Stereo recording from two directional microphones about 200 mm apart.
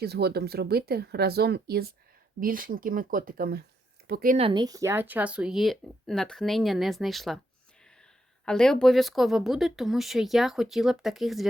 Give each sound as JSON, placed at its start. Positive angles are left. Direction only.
{"t": 0.0, "sound": "speech", "side_deg": -55}
{"t": 4.4, "sound": "speech", "side_deg": -25}
{"t": 8.4, "sound": "speech", "side_deg": 5}